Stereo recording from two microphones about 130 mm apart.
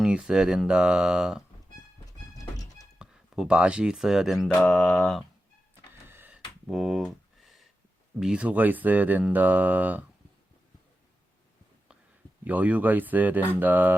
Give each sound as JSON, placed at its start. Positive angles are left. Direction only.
{"t": 0.0, "sound": "speech", "side_deg": -5}
{"t": 2.4, "sound": "music", "side_deg": 25}
{"t": 3.0, "sound": "speech", "side_deg": -5}
{"t": 6.1, "sound": "a sound", "side_deg": -15}
{"t": 6.3, "sound": "a sound", "side_deg": -5}
{"t": 8.2, "sound": "speech", "side_deg": -10}
{"t": 12.5, "sound": "speech", "side_deg": -10}